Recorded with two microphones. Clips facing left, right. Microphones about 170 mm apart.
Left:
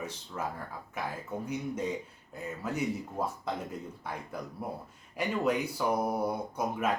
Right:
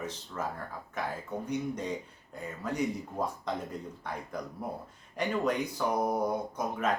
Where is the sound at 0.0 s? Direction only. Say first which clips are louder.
Right 1 dB; 10° left (ahead or behind).